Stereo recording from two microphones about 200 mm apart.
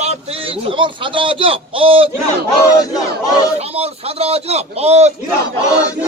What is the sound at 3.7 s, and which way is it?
A man's voice, 30° right (ahead or behind).